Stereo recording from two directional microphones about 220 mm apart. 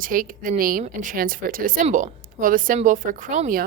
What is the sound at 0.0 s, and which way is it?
A woman's voice, 40° right (ahead or behind).